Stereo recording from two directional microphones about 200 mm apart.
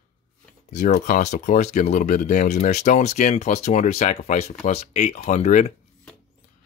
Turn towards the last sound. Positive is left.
turn(degrees=35)  # may be behind; listen again after turning